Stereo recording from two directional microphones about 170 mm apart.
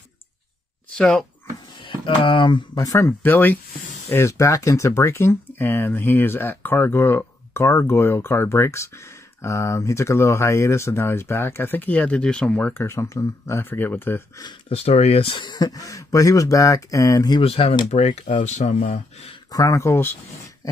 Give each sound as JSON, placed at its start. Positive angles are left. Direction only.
{"t": 0.8, "sound": "a sound", "side_deg": 5}
{"t": 1.8, "sound": "speech", "side_deg": 30}
{"t": 14.7, "sound": "speech", "side_deg": 35}
{"t": 17.4, "sound": "speech", "side_deg": 35}
{"t": 19.5, "sound": "speech", "side_deg": 20}